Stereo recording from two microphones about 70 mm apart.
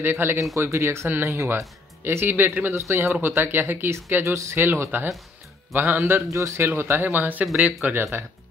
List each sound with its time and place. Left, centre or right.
0.0 s speech: right
2.7 s speech: right
6.3 s speech: right; by 7.9 s centre
7.9 s speech: right